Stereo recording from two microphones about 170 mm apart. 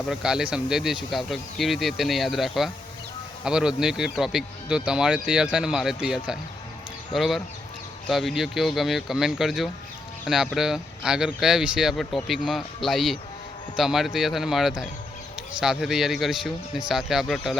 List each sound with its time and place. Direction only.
0.1 s speech: 5° right (ahead or behind)